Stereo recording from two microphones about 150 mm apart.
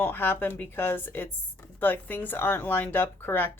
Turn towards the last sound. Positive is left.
turn(degrees=15)  # may be behind; listen again after turning